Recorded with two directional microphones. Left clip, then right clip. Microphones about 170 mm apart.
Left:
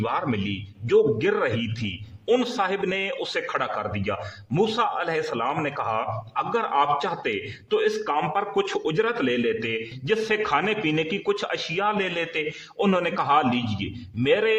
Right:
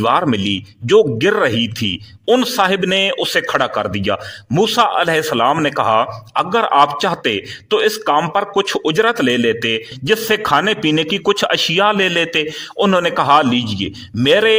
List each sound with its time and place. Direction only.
0.0 s a man's voice: 35° right (ahead or behind)